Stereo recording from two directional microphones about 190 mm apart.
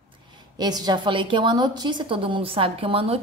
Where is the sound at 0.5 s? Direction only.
20° right (ahead or behind).